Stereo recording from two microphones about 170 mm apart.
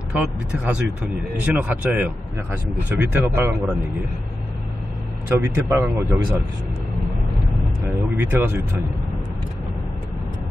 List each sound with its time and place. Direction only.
0.1 s speech: 5° right (ahead or behind)
5.3 s speech: 15° right (ahead or behind)
8.2 s speech: 10° right (ahead or behind)